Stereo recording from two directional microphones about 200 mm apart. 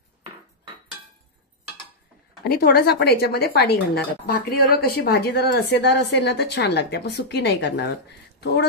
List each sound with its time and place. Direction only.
2.4 s speech: 50° left (ahead or behind)